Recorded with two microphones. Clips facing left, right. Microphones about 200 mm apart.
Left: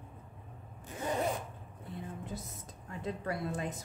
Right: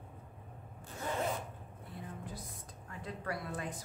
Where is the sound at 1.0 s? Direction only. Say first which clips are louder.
Left 3 dB; 15° left (ahead or behind).